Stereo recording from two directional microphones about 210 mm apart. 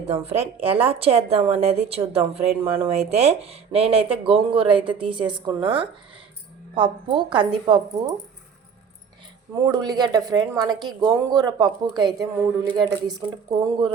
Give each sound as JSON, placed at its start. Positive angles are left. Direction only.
{"t": 0.1, "sound": "speech", "side_deg": -30}
{"t": 6.7, "sound": "speech", "side_deg": -20}
{"t": 9.6, "sound": "speech", "side_deg": -20}